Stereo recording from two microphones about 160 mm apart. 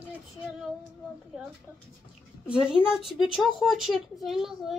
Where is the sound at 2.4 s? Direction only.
5° right (ahead or behind).